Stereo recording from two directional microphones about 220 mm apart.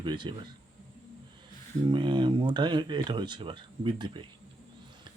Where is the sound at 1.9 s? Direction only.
20° right (ahead or behind).